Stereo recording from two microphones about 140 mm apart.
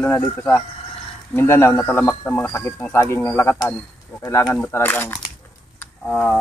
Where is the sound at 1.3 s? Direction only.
15° left (ahead or behind).